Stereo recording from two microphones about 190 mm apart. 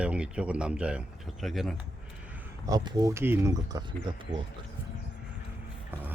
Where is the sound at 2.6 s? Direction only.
20° right (ahead or behind).